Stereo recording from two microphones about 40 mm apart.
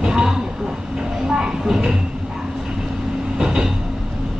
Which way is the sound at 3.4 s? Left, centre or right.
Centre.